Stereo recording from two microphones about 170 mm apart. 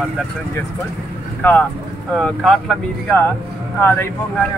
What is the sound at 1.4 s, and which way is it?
Speech, 10° left (ahead or behind).